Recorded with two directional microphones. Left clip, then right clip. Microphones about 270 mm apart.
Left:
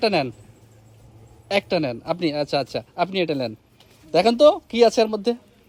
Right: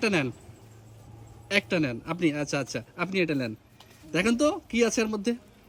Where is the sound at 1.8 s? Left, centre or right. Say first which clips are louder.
Left 4 dB; centre.